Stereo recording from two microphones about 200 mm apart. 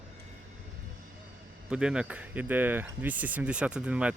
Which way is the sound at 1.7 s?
5° right (ahead or behind).